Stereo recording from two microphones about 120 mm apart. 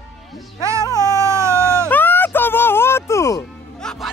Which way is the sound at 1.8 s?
15° left (ahead or behind).